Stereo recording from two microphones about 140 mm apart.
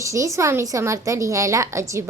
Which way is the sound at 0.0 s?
20° right (ahead or behind).